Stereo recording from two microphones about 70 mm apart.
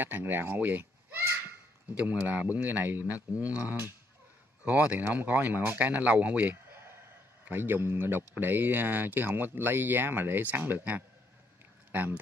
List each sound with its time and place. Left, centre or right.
0.0 s speech: right
7.4 s speech: right